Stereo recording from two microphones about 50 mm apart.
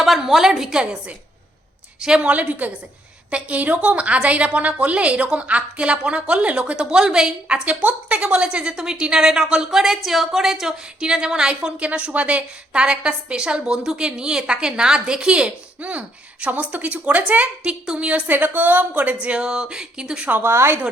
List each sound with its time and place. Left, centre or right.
0.0 s a woman's voice: centre
2.0 s a woman's voice: centre
2.3 s a woman's voice: right; by 11.7 s centre
11.8 s a woman's voice: right
17.6 s a woman's voice: centre
18.3 s a woman's voice: right; by 20.3 s centre
20.4 s a woman's voice: right